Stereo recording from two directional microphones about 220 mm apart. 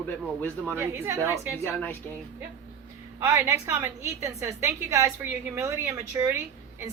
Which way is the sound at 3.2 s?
10° right (ahead or behind).